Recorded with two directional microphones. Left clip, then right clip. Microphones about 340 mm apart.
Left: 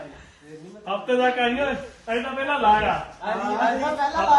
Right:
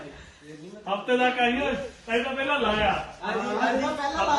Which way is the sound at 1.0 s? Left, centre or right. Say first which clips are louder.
Left 2 dB; centre.